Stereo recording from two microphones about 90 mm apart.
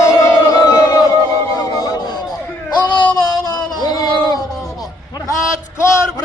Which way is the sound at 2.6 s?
60° left (ahead or behind).